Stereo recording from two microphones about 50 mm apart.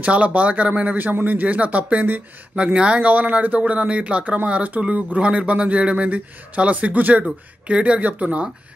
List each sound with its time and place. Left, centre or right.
0.0 s speech: right
0.9 s speech: right
2.5 s speech: centre